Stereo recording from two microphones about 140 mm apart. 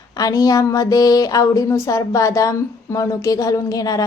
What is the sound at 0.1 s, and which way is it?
Speech, 25° left (ahead or behind).